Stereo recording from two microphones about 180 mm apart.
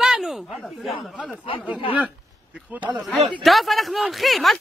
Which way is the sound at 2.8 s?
5° right (ahead or behind).